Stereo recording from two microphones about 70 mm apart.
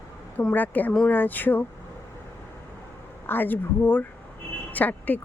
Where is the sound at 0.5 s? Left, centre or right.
Left.